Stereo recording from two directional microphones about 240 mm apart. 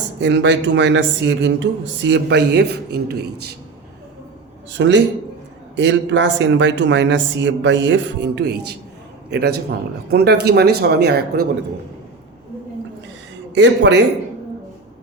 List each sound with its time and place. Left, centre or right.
0.2 s speech: right
4.7 s speech: right
13.5 s speech: right